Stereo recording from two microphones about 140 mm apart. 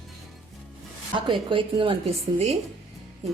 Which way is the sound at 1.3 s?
35° right (ahead or behind).